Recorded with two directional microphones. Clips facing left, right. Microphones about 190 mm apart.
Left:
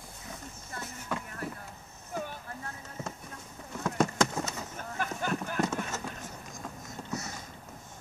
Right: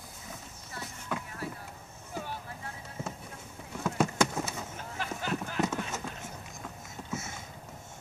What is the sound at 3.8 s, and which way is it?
Horse, 5° right (ahead or behind).